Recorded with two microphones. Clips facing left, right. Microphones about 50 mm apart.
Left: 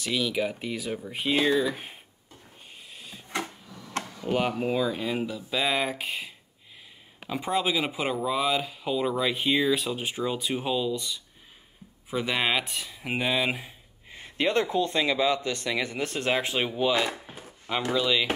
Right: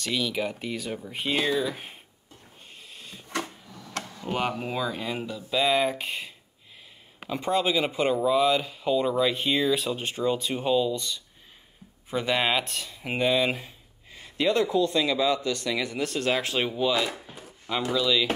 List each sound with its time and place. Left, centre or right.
0.0 s speech: centre
2.9 s a sound: centre
4.3 s speech: centre
14.1 s a man's voice: left
17.0 s chopping: left
17.9 s speech: left